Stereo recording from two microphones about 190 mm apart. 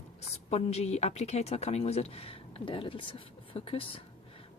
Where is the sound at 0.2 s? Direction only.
35° left (ahead or behind).